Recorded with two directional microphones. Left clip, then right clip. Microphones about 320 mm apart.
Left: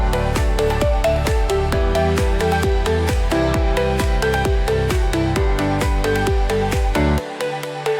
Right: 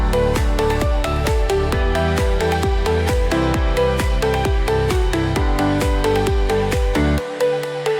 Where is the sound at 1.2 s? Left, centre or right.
Centre.